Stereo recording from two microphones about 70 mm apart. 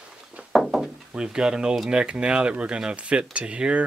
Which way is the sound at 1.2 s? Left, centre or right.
Centre.